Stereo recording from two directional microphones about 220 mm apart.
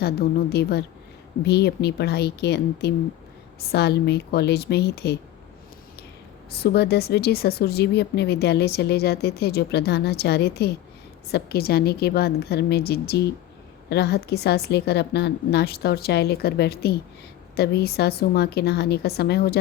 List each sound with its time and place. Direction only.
0.0 s speech: 45° left (ahead or behind)
6.5 s speech: 45° left (ahead or behind)